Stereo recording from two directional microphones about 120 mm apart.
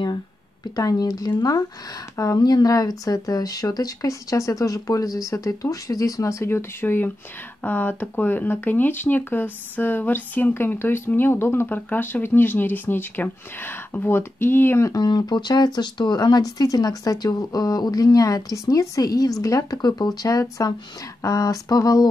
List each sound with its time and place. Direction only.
0.7 s speech: 30° left (ahead or behind)